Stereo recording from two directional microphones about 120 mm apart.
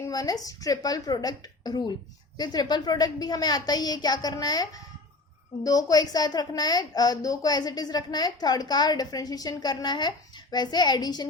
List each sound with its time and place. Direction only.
0.0 s a woman's voice: 30° left (ahead or behind)